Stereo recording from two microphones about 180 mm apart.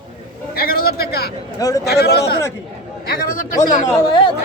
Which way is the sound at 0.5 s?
55° left (ahead or behind).